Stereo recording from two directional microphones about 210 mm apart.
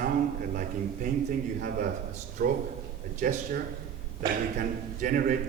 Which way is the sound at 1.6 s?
40° right (ahead or behind).